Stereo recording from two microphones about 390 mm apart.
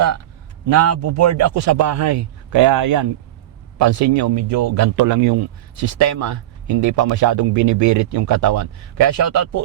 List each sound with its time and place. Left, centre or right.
0.7 s speech: right